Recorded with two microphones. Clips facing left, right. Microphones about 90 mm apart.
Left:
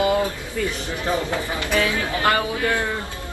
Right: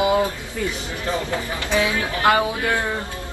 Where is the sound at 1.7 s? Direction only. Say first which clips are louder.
Right 1 dB; 20° right (ahead or behind).